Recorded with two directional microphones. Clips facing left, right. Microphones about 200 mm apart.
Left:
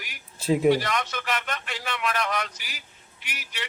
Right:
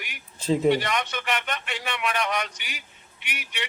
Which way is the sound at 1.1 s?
10° right (ahead or behind).